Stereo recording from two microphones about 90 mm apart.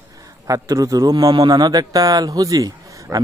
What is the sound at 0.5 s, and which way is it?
A man's voice, 40° right (ahead or behind).